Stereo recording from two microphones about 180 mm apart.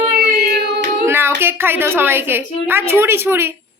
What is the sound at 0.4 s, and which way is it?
Hands, 65° right (ahead or behind).